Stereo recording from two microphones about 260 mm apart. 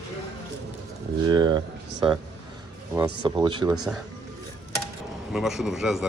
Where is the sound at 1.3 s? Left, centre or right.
Centre.